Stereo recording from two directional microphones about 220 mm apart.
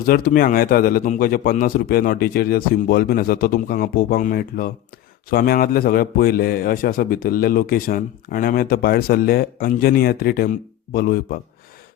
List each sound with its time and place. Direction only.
0.0 s a man's voice: 40° left (ahead or behind)